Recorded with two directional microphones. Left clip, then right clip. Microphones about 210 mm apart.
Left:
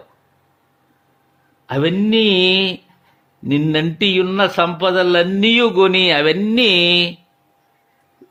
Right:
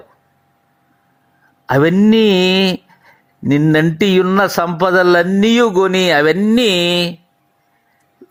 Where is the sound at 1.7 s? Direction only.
25° right (ahead or behind).